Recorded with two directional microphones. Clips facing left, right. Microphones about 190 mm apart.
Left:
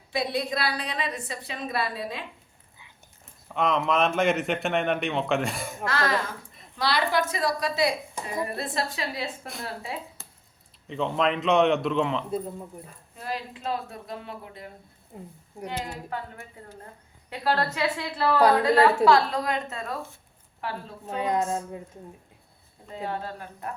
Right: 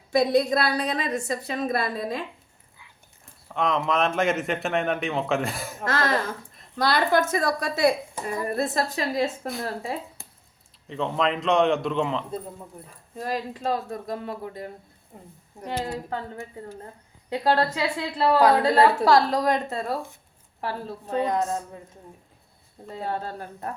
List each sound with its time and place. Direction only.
0.1 s a woman's voice: 45° right (ahead or behind)
3.5 s speech: centre (ahead or behind)
5.8 s a woman's voice: 40° right (ahead or behind)
10.8 s speech: centre (ahead or behind)
13.1 s a woman's voice: 40° right (ahead or behind)
17.2 s a woman's voice: 35° right (ahead or behind)
22.9 s a woman's voice: 40° right (ahead or behind)